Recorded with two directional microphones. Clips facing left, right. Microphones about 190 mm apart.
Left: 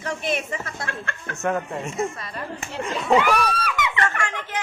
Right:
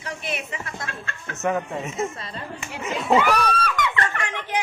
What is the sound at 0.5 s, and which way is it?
Speech, 50° left (ahead or behind).